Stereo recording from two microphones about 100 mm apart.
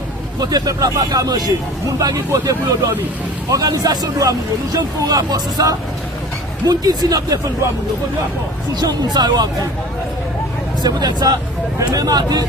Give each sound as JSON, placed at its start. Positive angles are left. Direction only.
{"t": 0.3, "sound": "speech", "side_deg": -40}
{"t": 8.8, "sound": "speech", "side_deg": -40}
{"t": 10.8, "sound": "speech", "side_deg": -40}